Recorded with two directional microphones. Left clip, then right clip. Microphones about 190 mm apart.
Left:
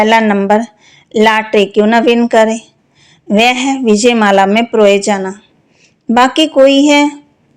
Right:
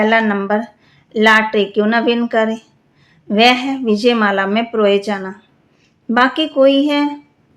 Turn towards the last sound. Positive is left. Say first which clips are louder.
# left 7 dB
turn(degrees=35)  # may be behind; listen again after turning